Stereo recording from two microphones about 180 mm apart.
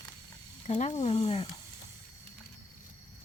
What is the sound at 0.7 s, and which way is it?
Speech, 40° left (ahead or behind).